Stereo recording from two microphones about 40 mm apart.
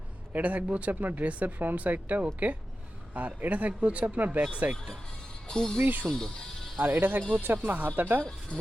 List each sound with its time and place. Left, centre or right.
0.3 s speech: right
0.9 s speech: right
1.2 s speech: right
5.5 s speech: centre
5.8 s speech: right
6.1 s speech: centre
7.0 s speech: right